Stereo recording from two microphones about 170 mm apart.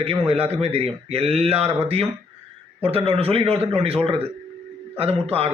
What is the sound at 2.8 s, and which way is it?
A man's voice, 35° right (ahead or behind).